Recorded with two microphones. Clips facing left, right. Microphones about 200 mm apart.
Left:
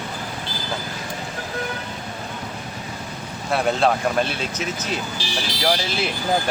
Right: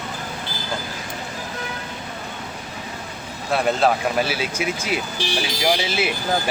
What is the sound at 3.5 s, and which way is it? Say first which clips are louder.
Speech: right 1 dB; centre (ahead or behind).